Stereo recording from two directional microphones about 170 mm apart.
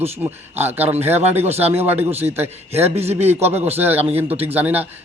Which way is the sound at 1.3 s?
10° right (ahead or behind).